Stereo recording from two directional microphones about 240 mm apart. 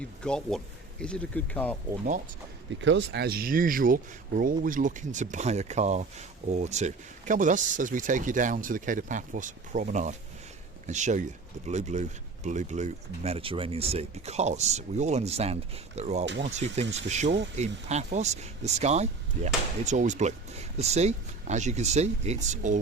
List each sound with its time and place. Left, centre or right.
0.2 s speech: centre
2.8 s speech: right